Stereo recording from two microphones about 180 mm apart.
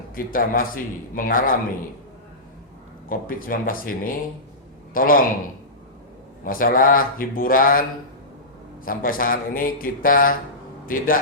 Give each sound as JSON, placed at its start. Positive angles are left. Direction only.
{"t": 0.2, "sound": "a man's voice", "side_deg": 50}
{"t": 3.1, "sound": "a man's voice", "side_deg": 50}
{"t": 6.4, "sound": "a man's voice", "side_deg": 50}